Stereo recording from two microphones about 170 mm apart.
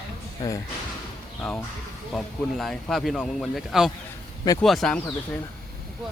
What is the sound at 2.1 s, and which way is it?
Speech, 5° left (ahead or behind).